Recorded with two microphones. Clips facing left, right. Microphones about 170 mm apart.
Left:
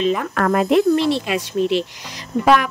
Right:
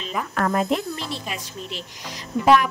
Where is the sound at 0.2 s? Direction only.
70° left (ahead or behind).